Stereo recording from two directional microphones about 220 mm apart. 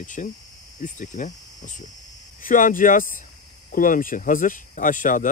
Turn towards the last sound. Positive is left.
turn(degrees=35)  # may be behind; listen again after turning